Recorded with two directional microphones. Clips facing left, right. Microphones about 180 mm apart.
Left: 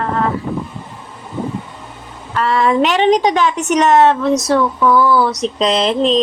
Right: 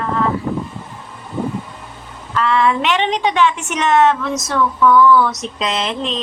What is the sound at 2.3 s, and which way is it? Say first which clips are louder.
A woman's voice: left 2 dB; 40° left (ahead or behind).